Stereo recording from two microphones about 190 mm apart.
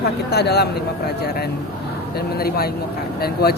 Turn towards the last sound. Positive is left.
turn(degrees=55)  # may be behind; listen again after turning